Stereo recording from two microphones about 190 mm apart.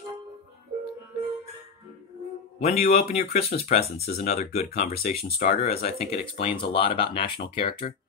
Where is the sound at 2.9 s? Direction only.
35° left (ahead or behind).